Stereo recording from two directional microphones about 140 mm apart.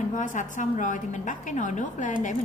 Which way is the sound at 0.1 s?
65° left (ahead or behind).